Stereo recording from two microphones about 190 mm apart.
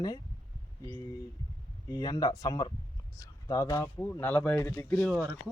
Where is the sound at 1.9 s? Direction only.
20° left (ahead or behind).